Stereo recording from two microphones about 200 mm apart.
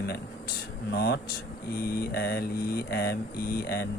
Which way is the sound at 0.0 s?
55° left (ahead or behind).